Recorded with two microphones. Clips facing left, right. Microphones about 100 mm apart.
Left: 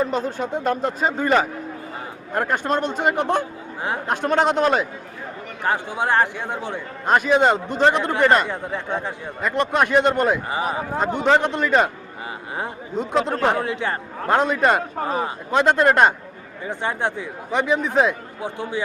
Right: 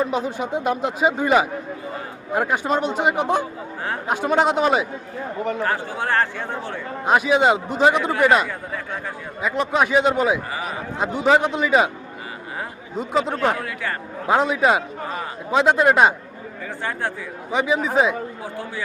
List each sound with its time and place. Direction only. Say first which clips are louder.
0.0 s a man's voice: even; 10° right (ahead or behind)
5.6 s speech: left 2 dB; 20° left (ahead or behind)
7.0 s a man's voice: even; 5° right (ahead or behind)
8.4 s speech: left 3 dB; 25° left (ahead or behind)
9.4 s speech: even; centre (ahead or behind)
10.5 s speech: left 4 dB; 35° left (ahead or behind)
11.2 s speech: right 2 dB; 5° right (ahead or behind)
13.0 s speech: even; centre (ahead or behind)
13.5 s speech: left 3 dB; 25° left (ahead or behind)
14.3 s speech: even; 5° right (ahead or behind)
16.6 s speech: left 3 dB; 20° left (ahead or behind)
17.5 s speech: even; 5° right (ahead or behind)
18.4 s speech: left 3 dB; 20° left (ahead or behind)